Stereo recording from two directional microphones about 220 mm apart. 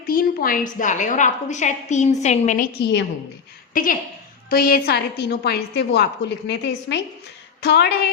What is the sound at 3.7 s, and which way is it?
A woman's voice, 40° left (ahead or behind).